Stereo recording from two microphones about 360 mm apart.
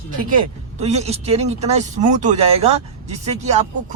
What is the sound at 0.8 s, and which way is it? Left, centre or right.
Speech, centre.